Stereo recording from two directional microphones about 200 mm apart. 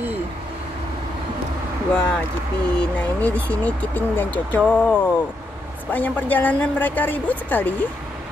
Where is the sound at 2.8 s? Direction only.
10° left (ahead or behind).